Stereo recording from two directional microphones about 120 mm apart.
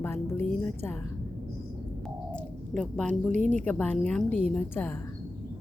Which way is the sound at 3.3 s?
80° right.